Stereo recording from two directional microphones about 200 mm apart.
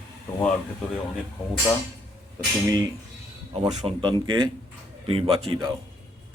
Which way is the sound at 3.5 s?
30° right (ahead or behind).